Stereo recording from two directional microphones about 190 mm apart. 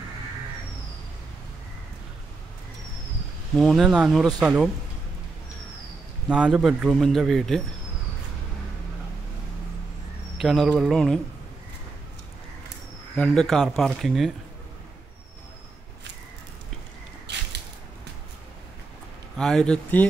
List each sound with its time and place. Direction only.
3.5 s a man's voice: centre (ahead or behind)
6.2 s a man's voice: 5° right (ahead or behind)
10.3 s a man's voice: centre (ahead or behind)
13.1 s a man's voice: 5° left (ahead or behind)
17.3 s a sound: 65° right (ahead or behind)
19.3 s a man's voice: 5° left (ahead or behind)